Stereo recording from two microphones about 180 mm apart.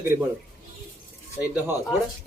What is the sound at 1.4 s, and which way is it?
Speech, 10° right (ahead or behind).